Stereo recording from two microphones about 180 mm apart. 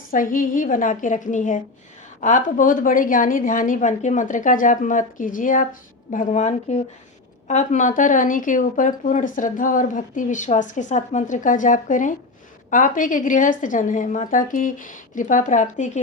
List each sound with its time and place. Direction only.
0.1 s speech: 50° left (ahead or behind)